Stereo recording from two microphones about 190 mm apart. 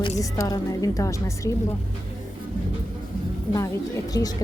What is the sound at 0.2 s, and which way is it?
A woman's voice, 20° left (ahead or behind).